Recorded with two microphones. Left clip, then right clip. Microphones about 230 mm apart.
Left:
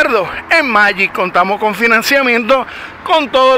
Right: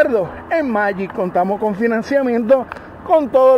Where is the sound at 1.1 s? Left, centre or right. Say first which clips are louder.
Left 5 dB; left.